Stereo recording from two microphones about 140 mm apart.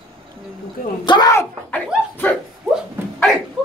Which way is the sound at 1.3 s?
15° left (ahead or behind).